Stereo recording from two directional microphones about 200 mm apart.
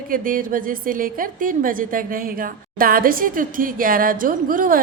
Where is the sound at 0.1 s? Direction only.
45° right (ahead or behind).